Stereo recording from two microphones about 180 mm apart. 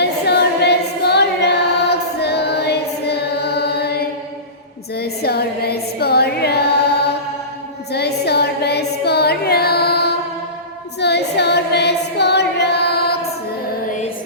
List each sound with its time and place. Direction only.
0.0 s child singing: 65° left (ahead or behind)
4.9 s female singing: 60° left (ahead or behind)
7.9 s music: 65° left (ahead or behind)
11.0 s female singing: 70° left (ahead or behind)